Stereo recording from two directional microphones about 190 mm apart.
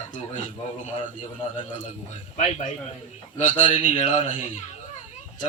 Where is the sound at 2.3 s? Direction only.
40° left (ahead or behind).